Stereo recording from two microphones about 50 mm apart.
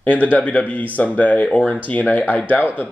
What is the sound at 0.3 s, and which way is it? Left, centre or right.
Speech, left.